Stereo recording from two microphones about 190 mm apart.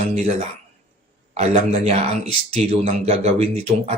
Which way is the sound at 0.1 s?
35° right (ahead or behind).